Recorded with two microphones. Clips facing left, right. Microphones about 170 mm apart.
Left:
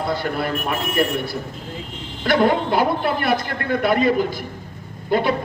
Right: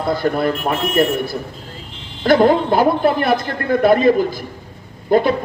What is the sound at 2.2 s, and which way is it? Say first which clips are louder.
Speech: right 5 dB; 45° right (ahead or behind).